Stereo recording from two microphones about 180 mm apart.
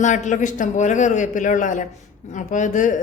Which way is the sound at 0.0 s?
40° left (ahead or behind).